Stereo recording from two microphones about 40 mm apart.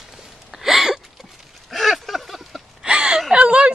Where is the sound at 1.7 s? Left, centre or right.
Centre.